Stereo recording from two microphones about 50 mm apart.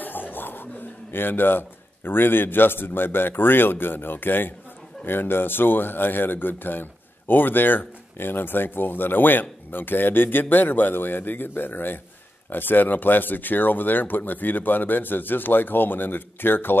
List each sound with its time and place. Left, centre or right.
0.0 s speech: left